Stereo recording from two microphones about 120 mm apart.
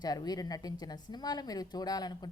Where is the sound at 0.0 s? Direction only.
35° left (ahead or behind).